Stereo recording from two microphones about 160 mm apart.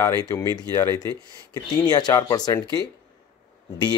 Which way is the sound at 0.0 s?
20° left (ahead or behind).